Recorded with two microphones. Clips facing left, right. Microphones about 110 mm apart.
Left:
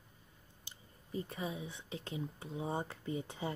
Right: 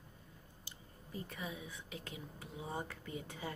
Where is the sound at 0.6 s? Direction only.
25° left (ahead or behind).